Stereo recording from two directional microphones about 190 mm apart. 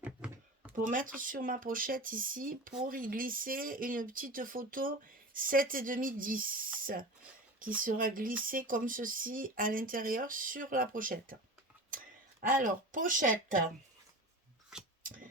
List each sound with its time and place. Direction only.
0.8 s speech: 45° right (ahead or behind)
12.4 s speech: 45° right (ahead or behind)